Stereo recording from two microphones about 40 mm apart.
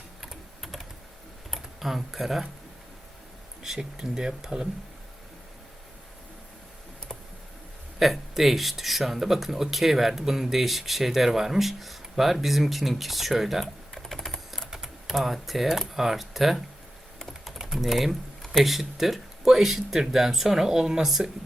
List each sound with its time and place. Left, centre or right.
0.2 s typing: centre
1.5 s speech: centre
3.6 s speech: centre
7.9 s speech: centre
14.1 s typing: centre
14.7 s typing: centre
16.0 s speech: centre